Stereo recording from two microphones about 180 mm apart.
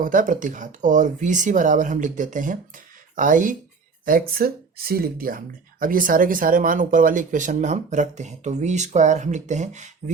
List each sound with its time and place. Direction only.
0.0 s speech: 45° right (ahead or behind)